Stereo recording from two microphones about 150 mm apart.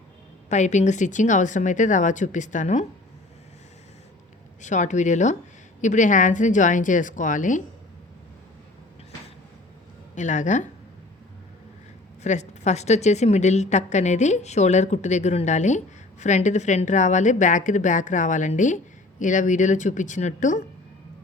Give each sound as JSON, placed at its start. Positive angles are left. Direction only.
{"t": 0.4, "sound": "a woman's voice", "side_deg": 50}
{"t": 4.6, "sound": "a woman's voice", "side_deg": 55}
{"t": 10.2, "sound": "a woman's voice", "side_deg": 55}
{"t": 12.2, "sound": "a woman's voice", "side_deg": 50}